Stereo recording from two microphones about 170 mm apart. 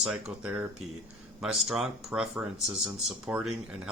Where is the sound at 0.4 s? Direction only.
10° right (ahead or behind).